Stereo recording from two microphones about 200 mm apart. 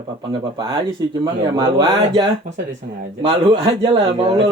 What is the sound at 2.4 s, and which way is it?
Speech, 40° right (ahead or behind).